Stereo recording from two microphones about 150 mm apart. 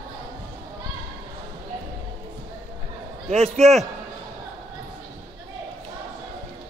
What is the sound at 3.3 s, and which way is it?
Speech, 45° right (ahead or behind).